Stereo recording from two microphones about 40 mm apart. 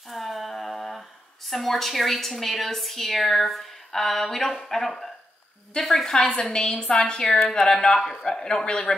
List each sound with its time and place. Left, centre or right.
0.1 s humming: centre
1.5 s a woman's voice: centre
6.6 s a woman's voice: left